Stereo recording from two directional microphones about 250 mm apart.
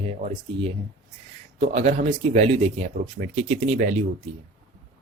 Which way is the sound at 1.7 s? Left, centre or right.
Right.